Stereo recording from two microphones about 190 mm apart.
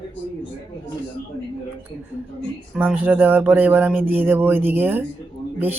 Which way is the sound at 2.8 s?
10° right (ahead or behind).